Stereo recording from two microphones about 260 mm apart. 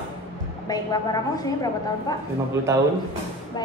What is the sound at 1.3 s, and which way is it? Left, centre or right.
Speech, centre.